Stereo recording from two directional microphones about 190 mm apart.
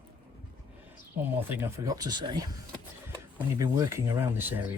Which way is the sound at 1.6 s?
15° right (ahead or behind).